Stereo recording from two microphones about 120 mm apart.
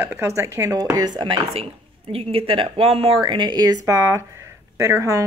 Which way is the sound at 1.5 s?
55° right (ahead or behind).